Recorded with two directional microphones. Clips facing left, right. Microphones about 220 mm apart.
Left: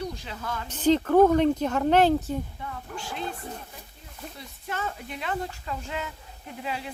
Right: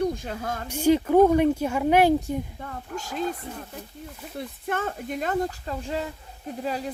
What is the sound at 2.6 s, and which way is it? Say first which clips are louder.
Speech: right 2 dB; 45° right (ahead or behind).